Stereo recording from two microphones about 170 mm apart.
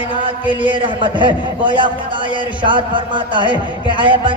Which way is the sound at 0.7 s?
30° right (ahead or behind).